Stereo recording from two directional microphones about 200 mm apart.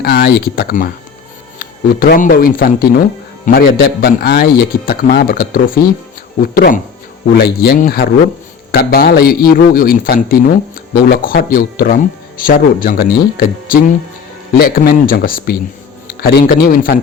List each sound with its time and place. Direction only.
0.0 s a man's voice: 50° left (ahead or behind)